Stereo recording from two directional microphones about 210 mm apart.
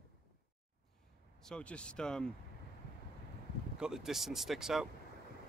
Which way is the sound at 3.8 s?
Centre (ahead or behind).